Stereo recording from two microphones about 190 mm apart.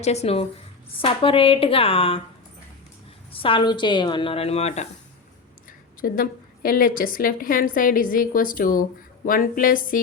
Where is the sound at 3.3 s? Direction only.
30° left (ahead or behind).